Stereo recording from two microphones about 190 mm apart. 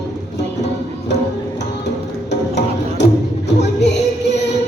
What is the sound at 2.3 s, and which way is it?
Music, 65° left (ahead or behind).